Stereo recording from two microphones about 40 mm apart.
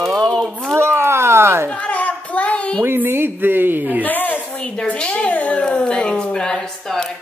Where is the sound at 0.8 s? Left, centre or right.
Right.